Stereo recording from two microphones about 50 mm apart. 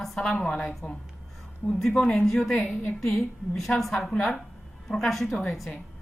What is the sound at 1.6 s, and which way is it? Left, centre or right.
A woman's voice, centre.